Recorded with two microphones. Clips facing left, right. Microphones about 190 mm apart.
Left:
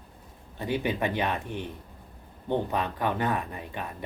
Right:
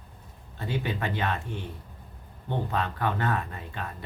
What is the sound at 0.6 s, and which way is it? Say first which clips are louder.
Speech: left 3 dB; 15° left (ahead or behind).